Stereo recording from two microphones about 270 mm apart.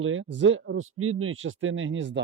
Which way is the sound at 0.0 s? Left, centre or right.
Right.